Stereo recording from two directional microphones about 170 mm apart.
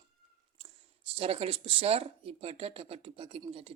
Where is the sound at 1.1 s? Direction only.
35° right (ahead or behind).